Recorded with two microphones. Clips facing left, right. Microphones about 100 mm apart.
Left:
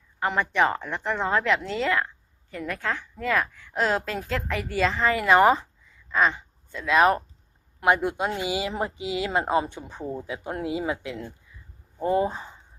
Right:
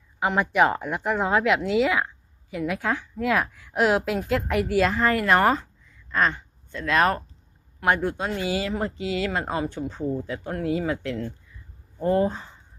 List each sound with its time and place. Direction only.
0.2 s a woman's voice: 5° right (ahead or behind); by 12.5 s 10° left (ahead or behind)